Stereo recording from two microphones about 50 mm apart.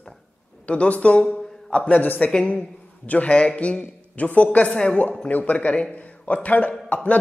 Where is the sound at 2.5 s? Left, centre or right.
Left.